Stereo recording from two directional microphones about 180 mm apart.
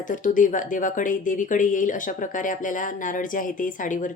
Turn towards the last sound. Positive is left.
turn(degrees=45)  # may be behind; listen again after turning